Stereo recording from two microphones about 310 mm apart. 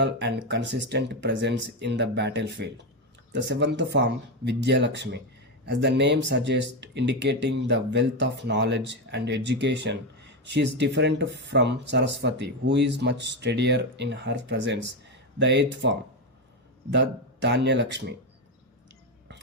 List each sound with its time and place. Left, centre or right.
0.0 s speech: right